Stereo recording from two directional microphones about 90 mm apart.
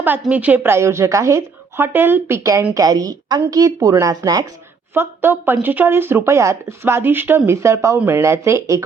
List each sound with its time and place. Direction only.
0.0 s speech: 20° right (ahead or behind)
2.7 s a woman's voice: 45° right (ahead or behind)
4.9 s speech: 25° right (ahead or behind)
7.9 s speech: 25° right (ahead or behind)